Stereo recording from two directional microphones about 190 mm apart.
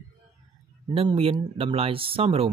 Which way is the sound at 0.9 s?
25° right (ahead or behind).